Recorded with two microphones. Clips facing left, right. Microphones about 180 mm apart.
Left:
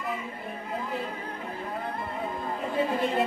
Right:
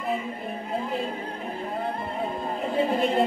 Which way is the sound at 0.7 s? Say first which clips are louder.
Right 4 dB; 25° right (ahead or behind).